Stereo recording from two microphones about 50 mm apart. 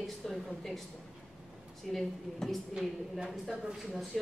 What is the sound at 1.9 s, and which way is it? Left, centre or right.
Speech, centre.